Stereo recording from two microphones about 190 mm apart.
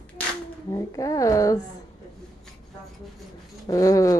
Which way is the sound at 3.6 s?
15° left (ahead or behind).